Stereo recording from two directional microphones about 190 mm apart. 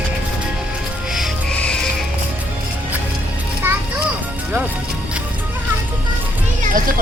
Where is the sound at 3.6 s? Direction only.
10° right (ahead or behind).